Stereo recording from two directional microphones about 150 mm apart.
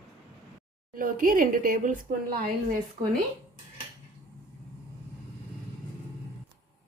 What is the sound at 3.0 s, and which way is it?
Speech, 50° right (ahead or behind).